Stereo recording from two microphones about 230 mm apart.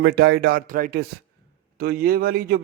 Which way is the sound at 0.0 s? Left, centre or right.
Right.